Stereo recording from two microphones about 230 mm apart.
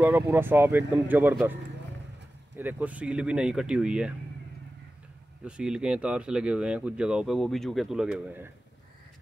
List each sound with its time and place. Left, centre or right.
0.0 s speech: centre
2.5 s speech: centre
5.4 s speech: centre